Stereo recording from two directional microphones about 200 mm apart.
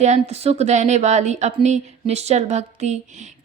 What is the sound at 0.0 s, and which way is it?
A woman's voice, 35° right (ahead or behind).